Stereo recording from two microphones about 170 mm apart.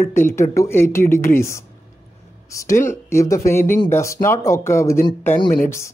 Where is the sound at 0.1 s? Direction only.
15° left (ahead or behind).